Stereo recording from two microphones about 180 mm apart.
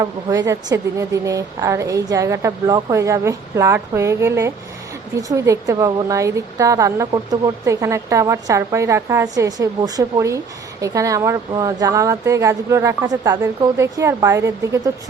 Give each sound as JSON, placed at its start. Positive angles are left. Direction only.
{"t": 0.0, "sound": "a woman's voice", "side_deg": -20}